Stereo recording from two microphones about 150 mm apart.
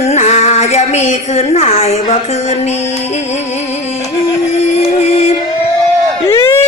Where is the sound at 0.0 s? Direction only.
45° left (ahead or behind).